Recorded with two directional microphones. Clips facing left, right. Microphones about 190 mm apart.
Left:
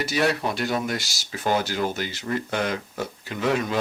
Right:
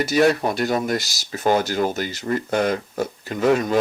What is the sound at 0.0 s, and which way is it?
Speech, 45° right (ahead or behind).